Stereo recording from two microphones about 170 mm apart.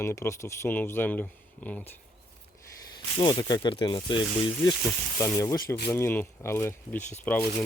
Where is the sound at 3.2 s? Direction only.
25° left (ahead or behind).